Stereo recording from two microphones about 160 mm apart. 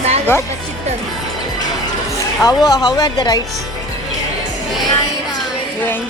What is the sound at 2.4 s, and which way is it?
Speech, 25° left (ahead or behind).